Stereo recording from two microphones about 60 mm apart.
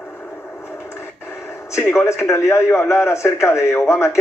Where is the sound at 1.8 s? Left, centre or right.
Left.